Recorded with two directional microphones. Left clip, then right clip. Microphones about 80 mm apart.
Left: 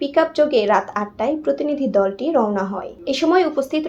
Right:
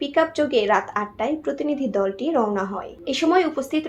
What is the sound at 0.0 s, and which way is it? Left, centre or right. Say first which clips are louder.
A woman's voice: left 4 dB; left.